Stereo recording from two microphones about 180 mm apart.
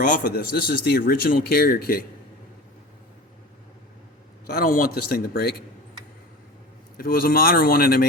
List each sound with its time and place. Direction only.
0.0 s a man's voice: 45° left (ahead or behind)
0.9 s speech: 60° left (ahead or behind)
4.4 s speech: 55° left (ahead or behind)
6.9 s speech: 55° left (ahead or behind)